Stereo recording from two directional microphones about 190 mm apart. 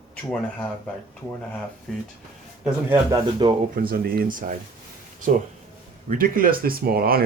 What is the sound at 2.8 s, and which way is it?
Speech, 10° right (ahead or behind).